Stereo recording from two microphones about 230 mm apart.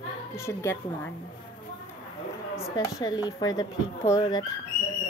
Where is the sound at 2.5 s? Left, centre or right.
Centre.